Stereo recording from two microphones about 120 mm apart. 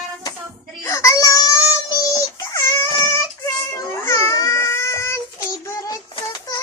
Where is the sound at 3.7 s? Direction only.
25° left (ahead or behind).